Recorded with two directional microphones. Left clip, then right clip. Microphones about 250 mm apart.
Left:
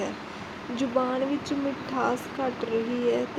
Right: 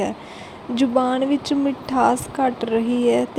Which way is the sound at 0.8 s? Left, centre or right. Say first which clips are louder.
Right 7 dB; right.